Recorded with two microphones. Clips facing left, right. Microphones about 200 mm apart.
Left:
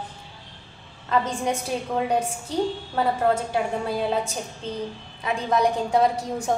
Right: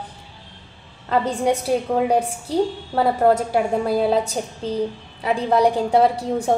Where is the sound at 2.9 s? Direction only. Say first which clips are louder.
Right 5 dB; 35° right (ahead or behind).